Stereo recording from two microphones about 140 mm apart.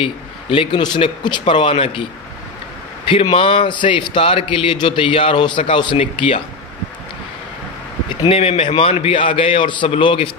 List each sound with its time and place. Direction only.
0.0 s a man's voice: 40° left (ahead or behind)
3.1 s a man's voice: 40° left (ahead or behind)
8.3 s a man's voice: 45° left (ahead or behind)